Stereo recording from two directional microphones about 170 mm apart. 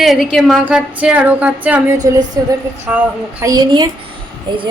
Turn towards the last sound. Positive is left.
turn(degrees=-25)  # may be behind; listen again after turning